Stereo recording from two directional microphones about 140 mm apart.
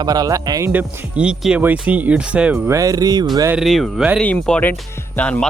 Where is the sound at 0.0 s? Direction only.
30° right (ahead or behind).